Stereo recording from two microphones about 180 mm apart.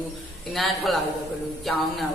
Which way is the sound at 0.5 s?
Centre (ahead or behind).